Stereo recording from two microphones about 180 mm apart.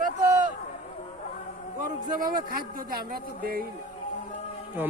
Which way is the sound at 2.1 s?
50° right (ahead or behind).